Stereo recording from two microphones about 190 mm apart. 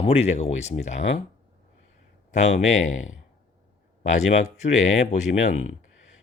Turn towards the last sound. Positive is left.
turn(degrees=35)  # may be behind; listen again after turning